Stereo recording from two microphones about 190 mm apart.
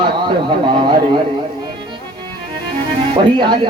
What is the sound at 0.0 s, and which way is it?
Speech, 25° right (ahead or behind).